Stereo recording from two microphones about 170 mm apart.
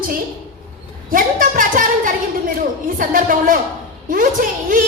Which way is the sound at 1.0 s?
55° right (ahead or behind).